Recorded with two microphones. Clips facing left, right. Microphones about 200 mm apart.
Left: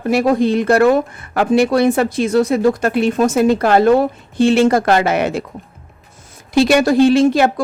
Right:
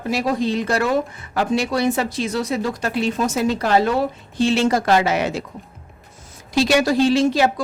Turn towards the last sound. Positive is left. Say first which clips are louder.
# left 5 dB
turn(degrees=55)  # may be behind; listen again after turning